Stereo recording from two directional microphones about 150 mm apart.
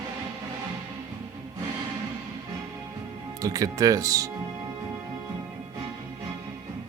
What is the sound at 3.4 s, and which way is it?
Speech, 25° right (ahead or behind).